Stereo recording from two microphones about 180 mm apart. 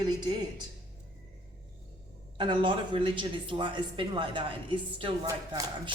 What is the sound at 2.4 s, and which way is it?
Speech, 25° right (ahead or behind).